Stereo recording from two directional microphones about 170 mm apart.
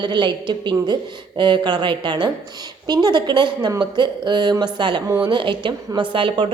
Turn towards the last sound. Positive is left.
turn(degrees=-30)  # may be behind; listen again after turning